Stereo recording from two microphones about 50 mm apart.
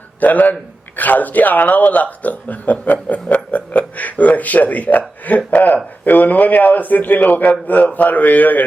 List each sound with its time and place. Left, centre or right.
0.2 s a man's voice: left